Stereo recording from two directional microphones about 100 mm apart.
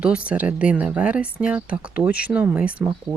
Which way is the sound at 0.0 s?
10° right (ahead or behind).